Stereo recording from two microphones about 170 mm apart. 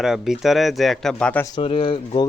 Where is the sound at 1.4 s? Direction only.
30° left (ahead or behind).